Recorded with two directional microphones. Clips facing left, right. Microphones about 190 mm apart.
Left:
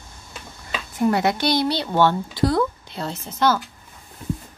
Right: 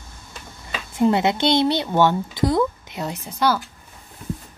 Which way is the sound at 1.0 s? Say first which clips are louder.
Right 2 dB; 25° right (ahead or behind).